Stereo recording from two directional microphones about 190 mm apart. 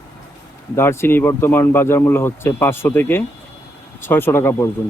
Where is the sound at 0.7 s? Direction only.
15° left (ahead or behind).